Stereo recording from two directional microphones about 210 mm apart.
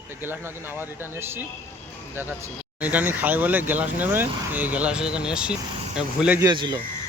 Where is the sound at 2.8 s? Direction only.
5° right (ahead or behind).